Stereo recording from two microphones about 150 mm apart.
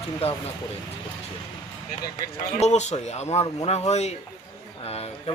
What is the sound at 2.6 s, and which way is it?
Speech, 50° left (ahead or behind).